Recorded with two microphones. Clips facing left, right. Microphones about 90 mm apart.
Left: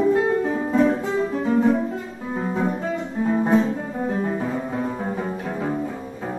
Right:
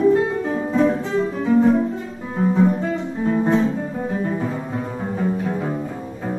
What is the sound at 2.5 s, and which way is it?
Music, 5° left (ahead or behind).